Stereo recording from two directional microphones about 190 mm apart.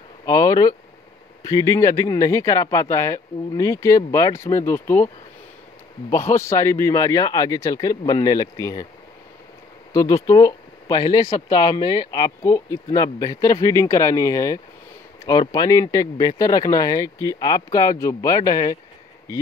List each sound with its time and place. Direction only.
0.2 s speech: 20° left (ahead or behind)
10.2 s speech: 20° left (ahead or behind)